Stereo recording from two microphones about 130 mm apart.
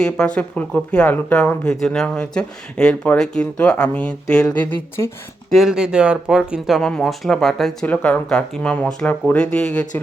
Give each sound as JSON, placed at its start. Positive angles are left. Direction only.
{"t": 0.3, "sound": "speech", "side_deg": 10}
{"t": 5.5, "sound": "speech", "side_deg": 0}